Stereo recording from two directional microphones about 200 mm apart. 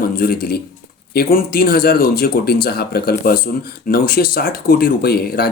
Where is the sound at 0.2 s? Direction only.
50° left (ahead or behind).